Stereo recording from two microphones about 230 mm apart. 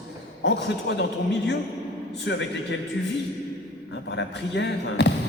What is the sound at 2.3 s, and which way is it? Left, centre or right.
Speech, left.